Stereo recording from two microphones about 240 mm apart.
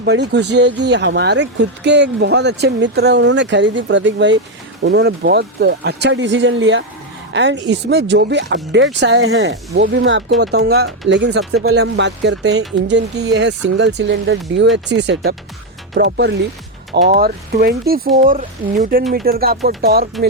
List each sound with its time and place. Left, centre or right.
0.0 s speech: right
11.1 s speech: right